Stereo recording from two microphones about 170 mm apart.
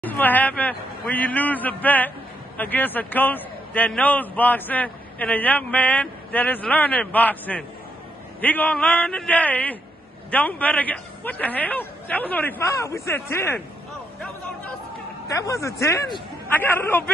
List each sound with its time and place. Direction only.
0.0 s a man's voice: 10° left (ahead or behind)
15.2 s a man's voice: 20° left (ahead or behind)